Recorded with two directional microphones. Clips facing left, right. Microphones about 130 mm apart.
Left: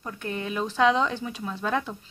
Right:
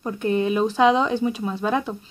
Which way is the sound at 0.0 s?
20° right (ahead or behind).